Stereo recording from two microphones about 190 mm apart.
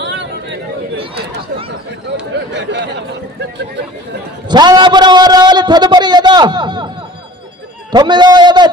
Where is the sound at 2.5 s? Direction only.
65° right (ahead or behind).